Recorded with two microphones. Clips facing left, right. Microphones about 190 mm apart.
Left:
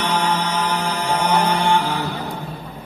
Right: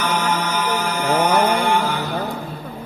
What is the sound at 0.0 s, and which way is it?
Mantra, 35° left (ahead or behind).